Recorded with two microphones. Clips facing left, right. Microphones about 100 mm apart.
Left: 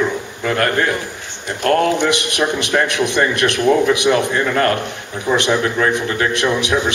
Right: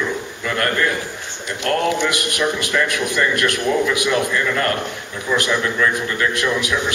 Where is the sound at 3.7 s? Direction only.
55° left (ahead or behind).